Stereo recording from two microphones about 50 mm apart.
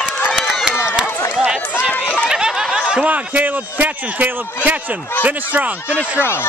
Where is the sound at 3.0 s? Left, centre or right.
Right.